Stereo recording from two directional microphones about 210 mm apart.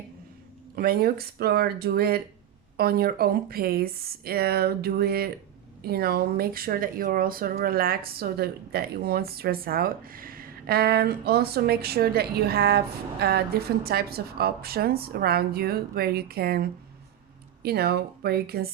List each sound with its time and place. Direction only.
0.8 s speech: 45° right (ahead or behind)